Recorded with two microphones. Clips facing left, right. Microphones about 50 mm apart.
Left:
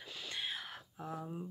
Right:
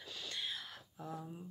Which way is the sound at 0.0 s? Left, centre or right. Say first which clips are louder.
Left 2 dB; centre.